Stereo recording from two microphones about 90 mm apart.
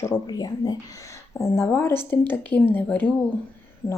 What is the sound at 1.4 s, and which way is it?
Speech, 30° left (ahead or behind).